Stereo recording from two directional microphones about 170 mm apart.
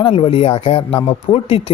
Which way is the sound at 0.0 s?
35° left (ahead or behind).